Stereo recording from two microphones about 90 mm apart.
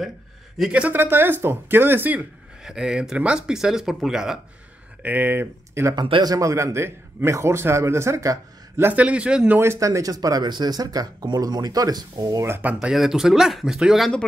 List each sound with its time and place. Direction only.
0.6 s speech: 15° right (ahead or behind)
2.6 s speech: 5° right (ahead or behind)
5.0 s speech: 20° right (ahead or behind)
6.2 s a man's voice: 40° right (ahead or behind)
8.7 s speech: 20° right (ahead or behind)
9.6 s speech: 35° right (ahead or behind)
12.4 s speech: 25° right (ahead or behind)
12.8 s speech: 5° right (ahead or behind)